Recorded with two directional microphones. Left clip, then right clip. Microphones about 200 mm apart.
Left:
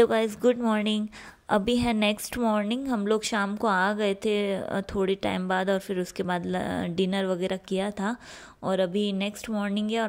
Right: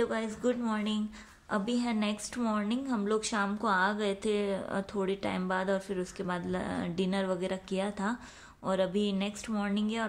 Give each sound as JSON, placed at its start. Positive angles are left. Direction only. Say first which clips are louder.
{"t": 0.0, "sound": "a woman's voice", "louder": "left 9 dB", "side_deg": 45}